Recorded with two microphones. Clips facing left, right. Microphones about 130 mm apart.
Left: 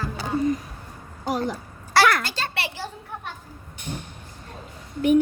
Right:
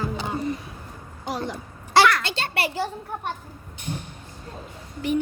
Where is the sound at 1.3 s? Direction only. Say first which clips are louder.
Left 4 dB; 45° left (ahead or behind).